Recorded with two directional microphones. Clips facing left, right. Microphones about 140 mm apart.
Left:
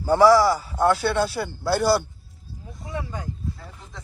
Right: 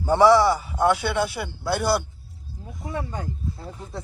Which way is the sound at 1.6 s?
5° left (ahead or behind).